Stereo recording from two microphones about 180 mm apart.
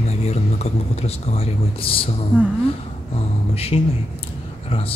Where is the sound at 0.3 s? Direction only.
35° left (ahead or behind).